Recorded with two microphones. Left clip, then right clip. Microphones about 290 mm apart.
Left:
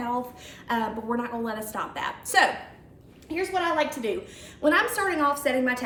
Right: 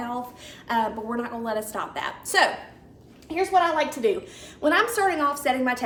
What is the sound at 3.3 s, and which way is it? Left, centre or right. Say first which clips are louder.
A woman's voice: right 5 dB; centre.